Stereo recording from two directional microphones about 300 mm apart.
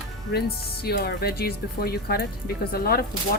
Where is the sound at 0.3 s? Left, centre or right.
Left.